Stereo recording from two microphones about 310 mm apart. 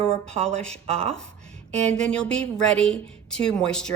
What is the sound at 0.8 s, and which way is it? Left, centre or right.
Speech, centre.